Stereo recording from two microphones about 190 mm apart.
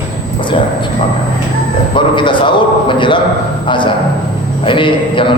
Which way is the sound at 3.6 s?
25° left (ahead or behind).